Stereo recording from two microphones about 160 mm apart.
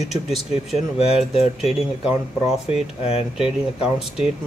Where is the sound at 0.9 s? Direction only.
40° left (ahead or behind).